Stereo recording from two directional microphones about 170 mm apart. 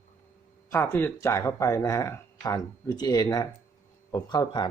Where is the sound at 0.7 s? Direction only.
15° left (ahead or behind).